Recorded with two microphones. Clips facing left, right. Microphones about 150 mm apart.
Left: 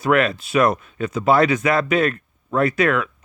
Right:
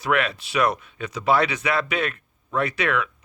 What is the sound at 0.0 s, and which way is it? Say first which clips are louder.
Speech: left 5 dB; 45° left (ahead or behind).